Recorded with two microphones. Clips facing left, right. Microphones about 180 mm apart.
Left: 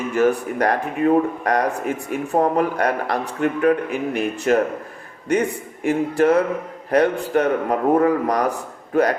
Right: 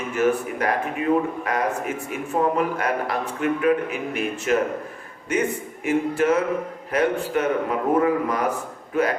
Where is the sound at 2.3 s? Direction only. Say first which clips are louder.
Left 3 dB; 40° left (ahead or behind).